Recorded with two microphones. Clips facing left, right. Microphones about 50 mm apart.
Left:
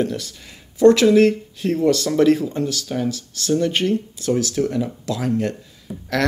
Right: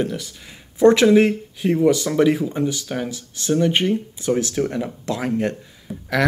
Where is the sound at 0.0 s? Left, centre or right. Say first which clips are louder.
Left 1 dB; centre.